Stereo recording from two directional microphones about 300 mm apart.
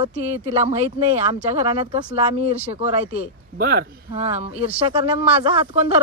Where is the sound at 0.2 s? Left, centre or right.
Right.